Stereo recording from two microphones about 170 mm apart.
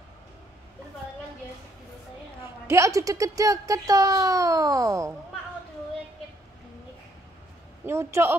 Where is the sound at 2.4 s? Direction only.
15° right (ahead or behind).